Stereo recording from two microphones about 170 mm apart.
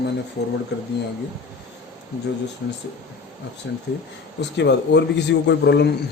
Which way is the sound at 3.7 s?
90° left.